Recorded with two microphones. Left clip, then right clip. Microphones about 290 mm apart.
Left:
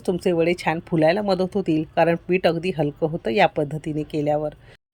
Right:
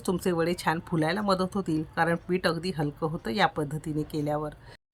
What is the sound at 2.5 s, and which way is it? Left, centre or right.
Speech, right.